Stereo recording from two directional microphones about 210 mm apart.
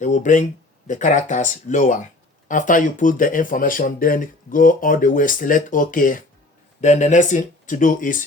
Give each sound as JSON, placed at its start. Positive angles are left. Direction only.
{"t": 0.0, "sound": "speech", "side_deg": 35}